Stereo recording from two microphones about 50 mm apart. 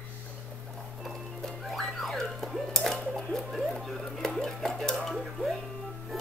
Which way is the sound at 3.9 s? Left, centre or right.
Centre.